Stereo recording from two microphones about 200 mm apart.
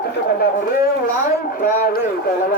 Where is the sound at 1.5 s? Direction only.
45° left (ahead or behind).